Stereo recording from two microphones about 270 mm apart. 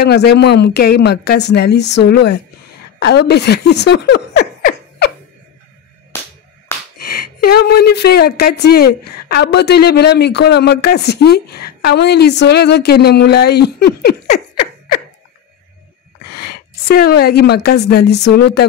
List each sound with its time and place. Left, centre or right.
0.0 s a woman's voice: left
7.1 s a woman's voice: left
16.3 s a woman's voice: left